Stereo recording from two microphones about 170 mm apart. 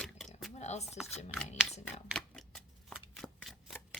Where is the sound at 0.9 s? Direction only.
5° right (ahead or behind).